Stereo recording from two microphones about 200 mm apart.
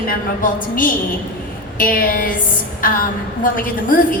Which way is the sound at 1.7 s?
45° left (ahead or behind).